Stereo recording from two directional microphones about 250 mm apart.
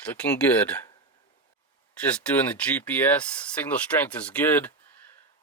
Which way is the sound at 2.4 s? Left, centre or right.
Centre.